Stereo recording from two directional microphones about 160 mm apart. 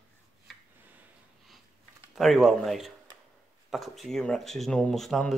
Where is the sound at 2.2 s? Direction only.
Centre (ahead or behind).